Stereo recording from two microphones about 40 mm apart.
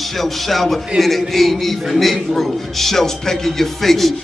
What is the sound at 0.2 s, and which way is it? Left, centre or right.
A man's voice, centre.